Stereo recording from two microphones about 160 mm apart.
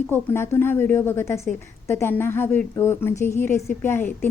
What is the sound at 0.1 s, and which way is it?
A woman's voice, 15° left (ahead or behind).